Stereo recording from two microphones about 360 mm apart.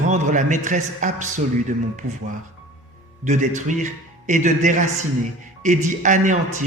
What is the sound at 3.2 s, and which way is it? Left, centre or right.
A man's voice, centre.